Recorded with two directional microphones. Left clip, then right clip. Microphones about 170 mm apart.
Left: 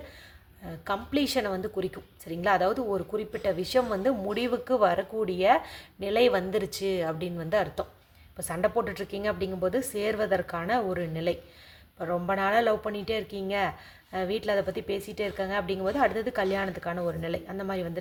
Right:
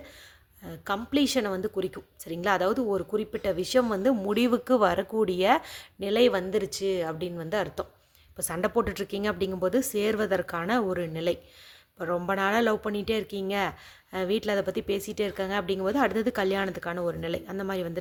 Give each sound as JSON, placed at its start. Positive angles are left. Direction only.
{"t": 0.6, "sound": "a woman's voice", "side_deg": -30}